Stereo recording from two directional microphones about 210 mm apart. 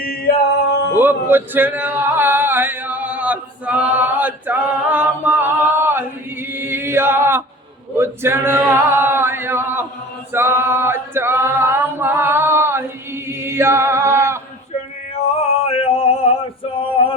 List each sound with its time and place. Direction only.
0.0 s male singing: 45° left (ahead or behind)
0.9 s a sound: 10° right (ahead or behind)
6.5 s chant: 10° right (ahead or behind)
7.9 s male singing: 10° right (ahead or behind)
10.3 s a capella: 10° right (ahead or behind)
13.2 s chant: 10° right (ahead or behind)
15.3 s a sound: 30° left (ahead or behind)